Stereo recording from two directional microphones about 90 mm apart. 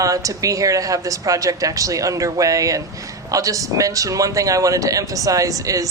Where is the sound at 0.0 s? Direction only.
40° right (ahead or behind).